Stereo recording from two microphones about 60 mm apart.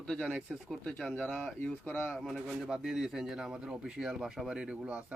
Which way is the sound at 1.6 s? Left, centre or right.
Left.